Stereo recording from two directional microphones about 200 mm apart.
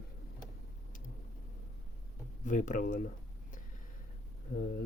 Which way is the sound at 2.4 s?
40° left (ahead or behind).